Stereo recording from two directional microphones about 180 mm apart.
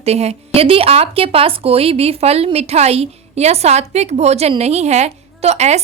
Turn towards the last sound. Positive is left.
turn(degrees=-35)  # may be behind; listen again after turning